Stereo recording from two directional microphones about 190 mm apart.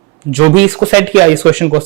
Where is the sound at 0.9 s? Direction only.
10° right (ahead or behind).